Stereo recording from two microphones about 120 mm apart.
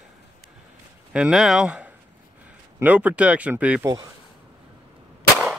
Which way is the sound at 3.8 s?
30° right (ahead or behind).